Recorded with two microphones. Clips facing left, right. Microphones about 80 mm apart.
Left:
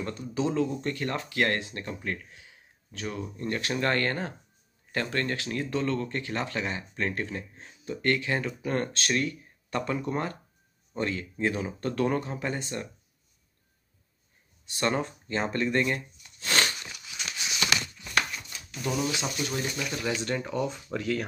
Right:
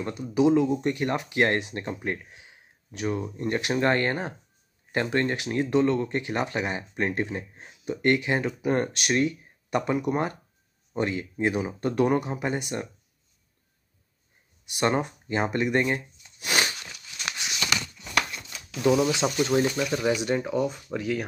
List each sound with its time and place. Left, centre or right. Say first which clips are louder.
0.0 s speech: right 7 dB; centre
14.7 s speech: right 3 dB; centre
18.8 s speech: right 9 dB; right
19.4 s speech: right 12 dB; right
20.1 s speech: right 3 dB; centre